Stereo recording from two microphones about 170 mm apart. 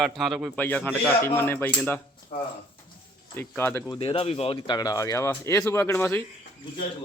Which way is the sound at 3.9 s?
30° left (ahead or behind).